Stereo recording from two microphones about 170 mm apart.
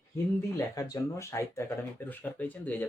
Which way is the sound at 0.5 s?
20° left (ahead or behind).